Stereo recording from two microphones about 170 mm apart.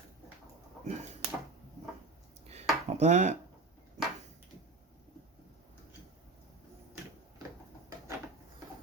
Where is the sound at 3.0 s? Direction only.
45° right (ahead or behind).